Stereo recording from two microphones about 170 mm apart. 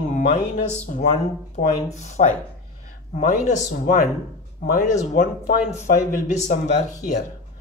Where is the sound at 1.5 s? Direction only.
40° left (ahead or behind).